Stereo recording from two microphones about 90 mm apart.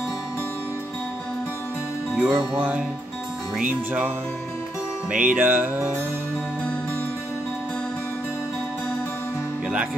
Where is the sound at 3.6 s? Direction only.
20° right (ahead or behind).